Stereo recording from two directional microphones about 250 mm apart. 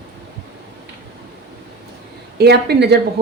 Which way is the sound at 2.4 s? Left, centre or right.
Right.